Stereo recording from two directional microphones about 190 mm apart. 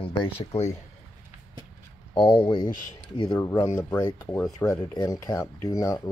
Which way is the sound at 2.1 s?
25° left (ahead or behind).